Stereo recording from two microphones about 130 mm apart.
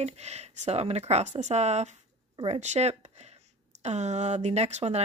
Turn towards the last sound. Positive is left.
turn(degrees=-55)  # may be behind; listen again after turning